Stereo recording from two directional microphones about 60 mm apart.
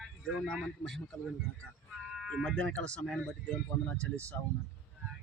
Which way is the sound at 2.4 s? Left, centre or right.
Centre.